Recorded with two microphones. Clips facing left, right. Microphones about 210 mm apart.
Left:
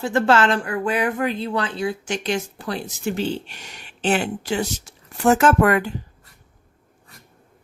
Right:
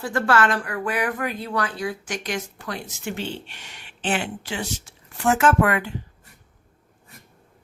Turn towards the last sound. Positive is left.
turn(degrees=40)  # may be behind; listen again after turning